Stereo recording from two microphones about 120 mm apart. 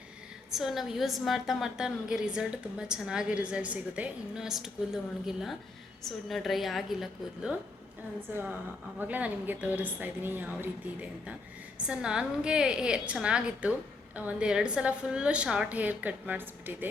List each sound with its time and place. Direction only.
0.5 s a woman's voice: centre (ahead or behind)
8.3 s a woman's voice: 15° right (ahead or behind)